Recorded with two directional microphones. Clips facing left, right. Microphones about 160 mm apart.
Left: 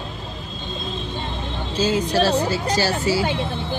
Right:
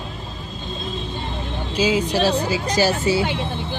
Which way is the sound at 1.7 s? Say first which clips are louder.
Even; 10° right (ahead or behind).